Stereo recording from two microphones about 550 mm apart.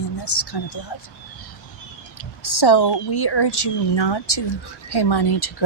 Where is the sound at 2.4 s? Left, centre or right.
Left.